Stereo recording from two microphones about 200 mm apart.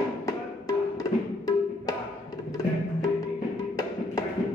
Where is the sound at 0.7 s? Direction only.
15° left (ahead or behind).